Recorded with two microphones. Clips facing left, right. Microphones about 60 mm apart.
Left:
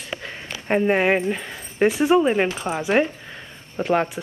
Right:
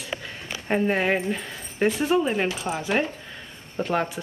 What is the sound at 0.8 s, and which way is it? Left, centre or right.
Speech, centre.